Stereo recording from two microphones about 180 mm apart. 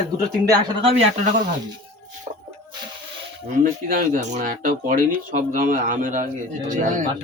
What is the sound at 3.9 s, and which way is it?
Speech, 45° right (ahead or behind).